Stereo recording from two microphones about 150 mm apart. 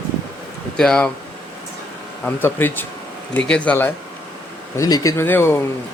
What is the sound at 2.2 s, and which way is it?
Speech, 15° left (ahead or behind).